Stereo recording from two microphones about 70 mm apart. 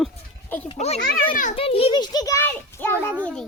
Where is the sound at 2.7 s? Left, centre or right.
Left.